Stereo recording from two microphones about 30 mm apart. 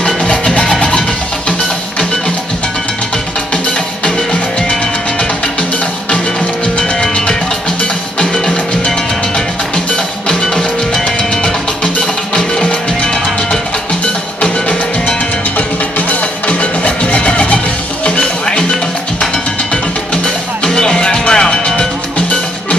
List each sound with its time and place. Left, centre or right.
0.7 s music: left
4.0 s music: left
8.2 s music: left
10.2 s music: left
14.4 s music: left
20.6 s music: left